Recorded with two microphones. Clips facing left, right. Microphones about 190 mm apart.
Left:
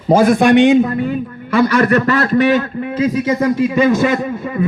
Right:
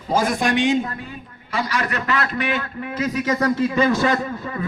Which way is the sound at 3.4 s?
15° left (ahead or behind).